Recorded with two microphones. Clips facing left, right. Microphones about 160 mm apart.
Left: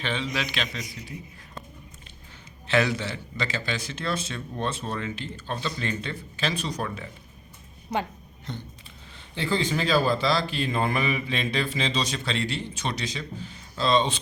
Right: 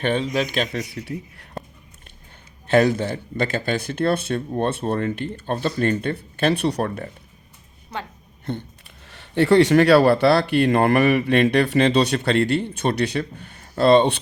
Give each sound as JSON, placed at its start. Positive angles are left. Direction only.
{"t": 0.0, "sound": "speech", "side_deg": -55}
{"t": 1.0, "sound": "speech", "side_deg": -65}
{"t": 2.6, "sound": "speech", "side_deg": -50}
{"t": 7.9, "sound": "speech", "side_deg": 15}
{"t": 8.5, "sound": "speech", "side_deg": -60}
{"t": 9.0, "sound": "speech", "side_deg": -70}